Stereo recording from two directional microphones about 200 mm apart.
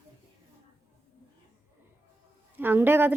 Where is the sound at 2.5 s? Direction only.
10° right (ahead or behind).